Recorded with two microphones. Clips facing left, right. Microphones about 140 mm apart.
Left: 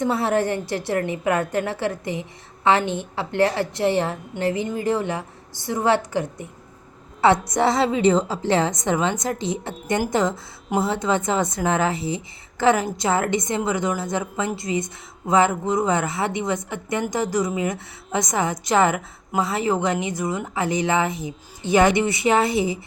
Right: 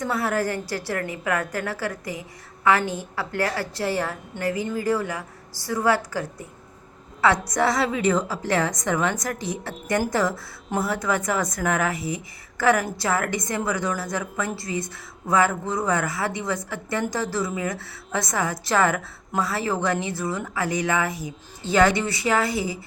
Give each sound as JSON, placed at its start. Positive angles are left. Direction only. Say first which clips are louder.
{"t": 0.0, "sound": "a woman's voice", "louder": "left 4 dB", "side_deg": 25}